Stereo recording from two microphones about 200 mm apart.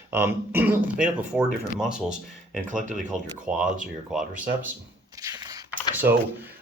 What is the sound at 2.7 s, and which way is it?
Speech, 40° right (ahead or behind).